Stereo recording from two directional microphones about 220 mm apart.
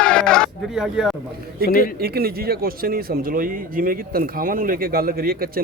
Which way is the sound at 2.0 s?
45° right (ahead or behind).